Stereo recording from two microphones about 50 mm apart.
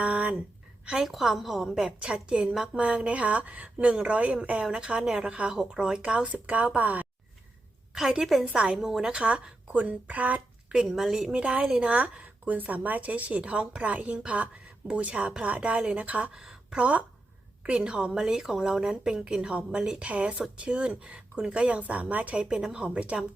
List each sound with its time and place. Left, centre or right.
0.0 s a sound: right
1.0 s a woman's voice: centre
2.0 s a woman's voice: centre
7.9 s a woman's voice: centre; by 10.8 s right
10.8 s a woman's voice: centre; by 16.4 s right
16.4 s a sound: centre
16.7 s a woman's voice: right
22.4 s a woman's voice: centre